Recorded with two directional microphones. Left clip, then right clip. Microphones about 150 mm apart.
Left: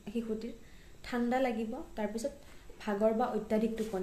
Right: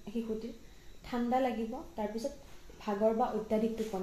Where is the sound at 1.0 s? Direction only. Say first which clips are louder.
Even; 10° left (ahead or behind).